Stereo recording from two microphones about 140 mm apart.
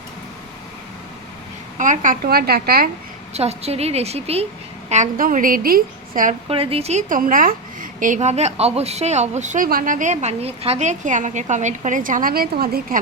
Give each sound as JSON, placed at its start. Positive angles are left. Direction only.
{"t": 1.8, "sound": "a woman's voice", "side_deg": -65}
{"t": 3.3, "sound": "a woman's voice", "side_deg": -50}
{"t": 4.9, "sound": "a woman's voice", "side_deg": -65}
{"t": 6.5, "sound": "a woman's voice", "side_deg": -45}
{"t": 7.1, "sound": "a woman's voice", "side_deg": -75}